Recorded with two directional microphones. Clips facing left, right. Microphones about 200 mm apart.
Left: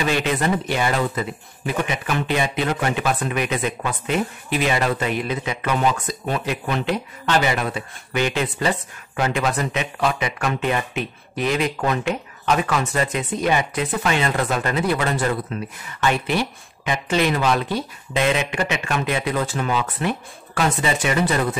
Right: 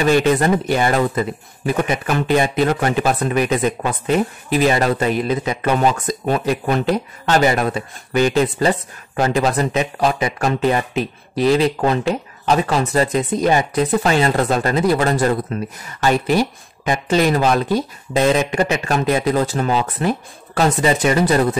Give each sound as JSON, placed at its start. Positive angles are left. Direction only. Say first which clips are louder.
{"t": 0.1, "sound": "speech", "louder": "right 6 dB", "side_deg": -45}